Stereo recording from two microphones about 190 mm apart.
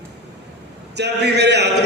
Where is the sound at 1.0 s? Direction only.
60° right (ahead or behind).